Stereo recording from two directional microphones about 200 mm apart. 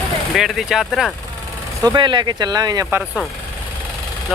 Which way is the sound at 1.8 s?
20° right (ahead or behind).